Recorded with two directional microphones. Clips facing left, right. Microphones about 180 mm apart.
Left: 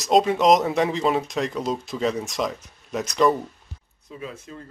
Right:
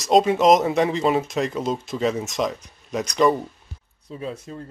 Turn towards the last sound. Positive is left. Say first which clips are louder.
# right 2 dB
turn(degrees=-35)  # may be behind; listen again after turning